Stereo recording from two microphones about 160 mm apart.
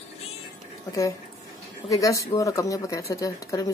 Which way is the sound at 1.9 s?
20° left (ahead or behind).